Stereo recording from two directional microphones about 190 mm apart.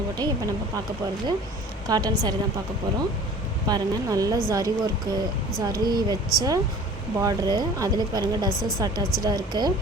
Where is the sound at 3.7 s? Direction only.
20° right (ahead or behind).